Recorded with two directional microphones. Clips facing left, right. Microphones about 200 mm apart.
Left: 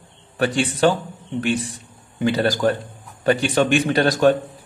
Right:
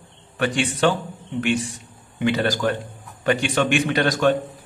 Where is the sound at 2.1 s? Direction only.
35° left (ahead or behind).